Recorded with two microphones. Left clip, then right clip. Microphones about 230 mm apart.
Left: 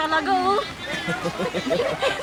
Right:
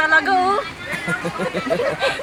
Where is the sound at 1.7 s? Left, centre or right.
Right.